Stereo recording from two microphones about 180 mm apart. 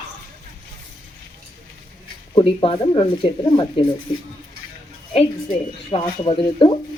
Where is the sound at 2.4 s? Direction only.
30° left (ahead or behind).